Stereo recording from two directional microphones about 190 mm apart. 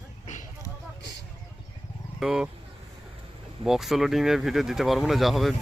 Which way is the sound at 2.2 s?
Centre (ahead or behind).